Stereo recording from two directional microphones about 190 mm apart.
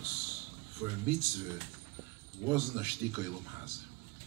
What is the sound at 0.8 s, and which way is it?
Speech, 15° right (ahead or behind).